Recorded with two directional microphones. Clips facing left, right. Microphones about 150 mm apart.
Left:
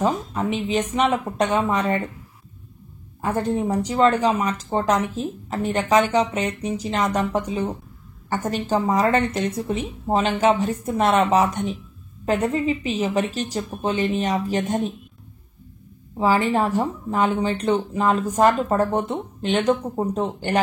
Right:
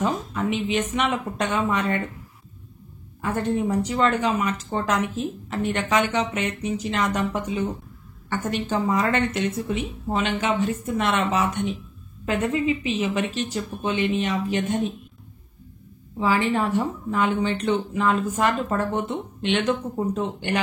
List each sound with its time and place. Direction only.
0.0 s speech: 35° left (ahead or behind)
3.2 s speech: 40° left (ahead or behind)
16.2 s speech: 40° left (ahead or behind)